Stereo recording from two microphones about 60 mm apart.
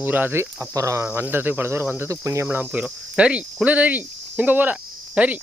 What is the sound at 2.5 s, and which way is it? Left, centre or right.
Speech, right.